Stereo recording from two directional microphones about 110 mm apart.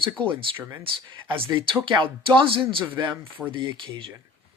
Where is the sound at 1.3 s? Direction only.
50° right (ahead or behind).